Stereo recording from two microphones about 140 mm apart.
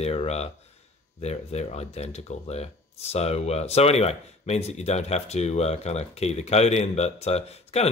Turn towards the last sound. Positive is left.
turn(degrees=45)  # may be behind; listen again after turning